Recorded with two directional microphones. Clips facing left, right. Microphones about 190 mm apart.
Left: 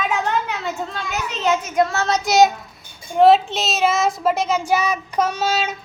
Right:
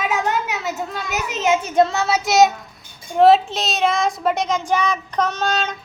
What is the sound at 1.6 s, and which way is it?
Child singing, 30° right (ahead or behind).